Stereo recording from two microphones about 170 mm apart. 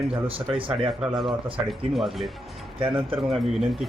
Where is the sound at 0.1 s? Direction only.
30° right (ahead or behind).